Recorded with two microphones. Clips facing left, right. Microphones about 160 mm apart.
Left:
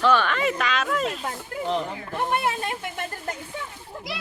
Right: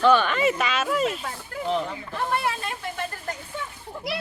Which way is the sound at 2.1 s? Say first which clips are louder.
Left 2 dB; 20° left (ahead or behind).